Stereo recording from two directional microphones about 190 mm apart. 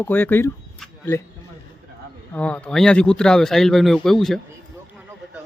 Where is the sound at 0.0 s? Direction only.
10° left (ahead or behind).